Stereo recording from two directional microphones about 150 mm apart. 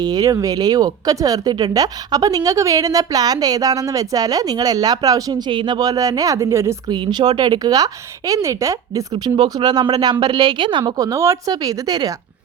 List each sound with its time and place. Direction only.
0.0 s speech: 25° right (ahead or behind)
6.9 s speech: 30° right (ahead or behind)